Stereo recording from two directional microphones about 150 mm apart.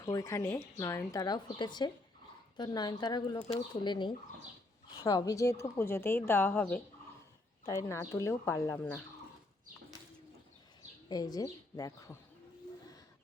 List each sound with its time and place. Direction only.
0.0 s a woman's voice: 20° left (ahead or behind)
11.1 s a woman's voice: 25° left (ahead or behind)